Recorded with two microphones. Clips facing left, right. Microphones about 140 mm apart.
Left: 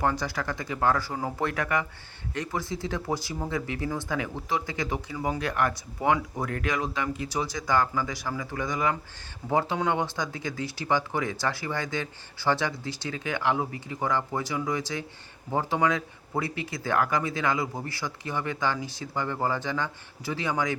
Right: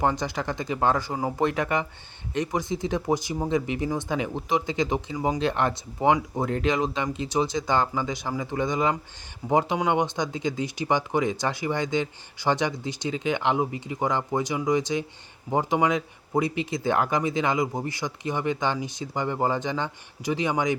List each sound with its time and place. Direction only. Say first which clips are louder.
0.0 s speech: right 2 dB; 20° right (ahead or behind)